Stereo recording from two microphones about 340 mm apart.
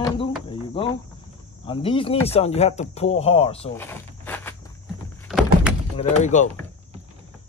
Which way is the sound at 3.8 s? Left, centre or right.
Centre.